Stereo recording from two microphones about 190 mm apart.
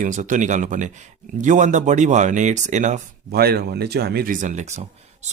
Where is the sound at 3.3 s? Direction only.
55° right (ahead or behind); by 5.3 s 35° right (ahead or behind).